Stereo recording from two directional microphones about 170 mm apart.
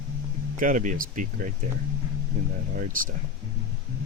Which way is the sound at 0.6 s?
50° right (ahead or behind).